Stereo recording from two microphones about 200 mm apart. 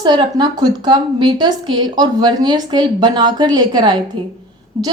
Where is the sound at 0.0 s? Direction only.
20° right (ahead or behind).